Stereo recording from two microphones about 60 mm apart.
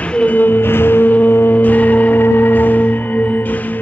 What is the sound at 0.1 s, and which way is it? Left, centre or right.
Music, left.